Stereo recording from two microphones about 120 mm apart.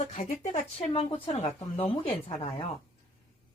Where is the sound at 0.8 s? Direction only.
55° left (ahead or behind).